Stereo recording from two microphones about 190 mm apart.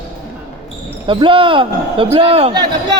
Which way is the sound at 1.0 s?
25° right (ahead or behind).